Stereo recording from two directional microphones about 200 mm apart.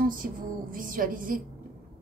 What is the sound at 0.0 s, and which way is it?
A woman's voice, 45° right (ahead or behind).